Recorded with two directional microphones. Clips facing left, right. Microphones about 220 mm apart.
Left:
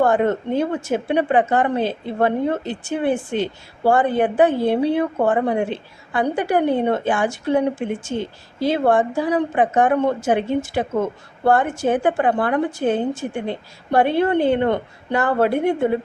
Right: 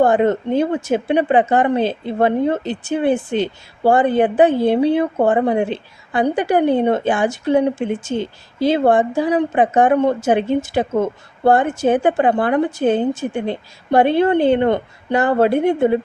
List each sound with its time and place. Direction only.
0.0 s a woman's voice: 20° right (ahead or behind)